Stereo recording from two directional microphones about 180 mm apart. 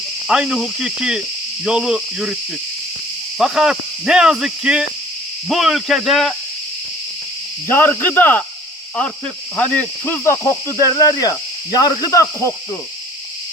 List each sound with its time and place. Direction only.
0.3 s cricket: 5° right (ahead or behind)
7.7 s cricket: 10° left (ahead or behind)